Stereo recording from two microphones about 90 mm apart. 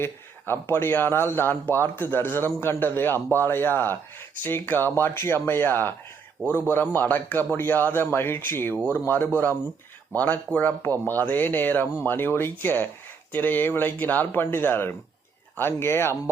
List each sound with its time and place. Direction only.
0.0 s speech: 25° left (ahead or behind)